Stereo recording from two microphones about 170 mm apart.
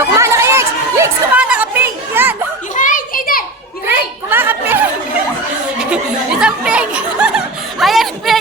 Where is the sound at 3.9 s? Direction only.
10° right (ahead or behind).